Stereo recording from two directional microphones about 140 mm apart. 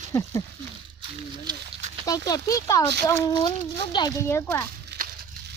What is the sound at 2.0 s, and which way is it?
Speech, 25° left (ahead or behind).